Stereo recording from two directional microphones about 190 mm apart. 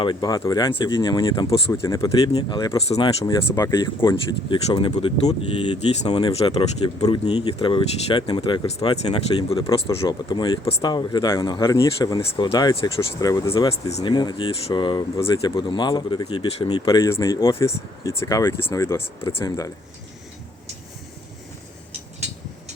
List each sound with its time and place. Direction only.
0.0 s speech: 25° left (ahead or behind)